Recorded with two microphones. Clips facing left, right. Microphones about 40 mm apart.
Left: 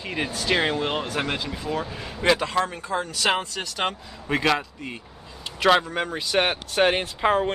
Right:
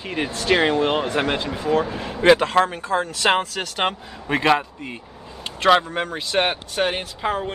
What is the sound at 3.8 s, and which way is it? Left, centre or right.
Speech, right.